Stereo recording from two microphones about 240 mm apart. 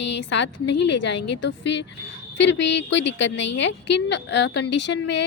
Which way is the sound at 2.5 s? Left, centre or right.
Left.